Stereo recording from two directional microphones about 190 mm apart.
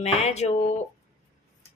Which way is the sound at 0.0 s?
35° left (ahead or behind).